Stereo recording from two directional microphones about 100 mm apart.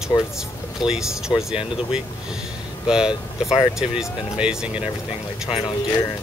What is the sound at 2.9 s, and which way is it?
Speech, 10° right (ahead or behind).